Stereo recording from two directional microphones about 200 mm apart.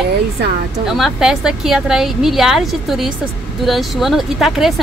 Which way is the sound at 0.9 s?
Centre (ahead or behind).